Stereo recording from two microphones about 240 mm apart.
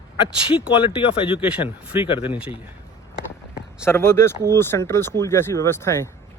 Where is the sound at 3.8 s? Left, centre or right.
Centre.